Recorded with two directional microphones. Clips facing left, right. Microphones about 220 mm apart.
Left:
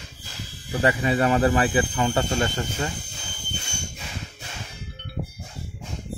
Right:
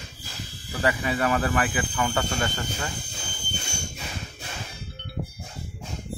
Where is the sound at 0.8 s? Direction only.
25° left (ahead or behind).